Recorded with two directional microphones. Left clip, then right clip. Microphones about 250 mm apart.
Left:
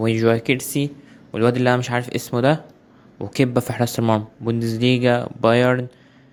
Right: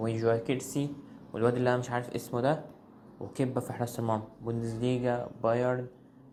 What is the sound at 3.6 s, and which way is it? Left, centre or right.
Speech, left.